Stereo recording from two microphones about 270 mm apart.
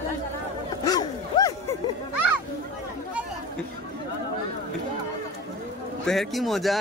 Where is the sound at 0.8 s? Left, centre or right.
Centre.